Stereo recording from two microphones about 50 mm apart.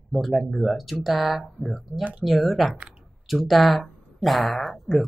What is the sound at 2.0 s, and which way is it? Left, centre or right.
Speech, right.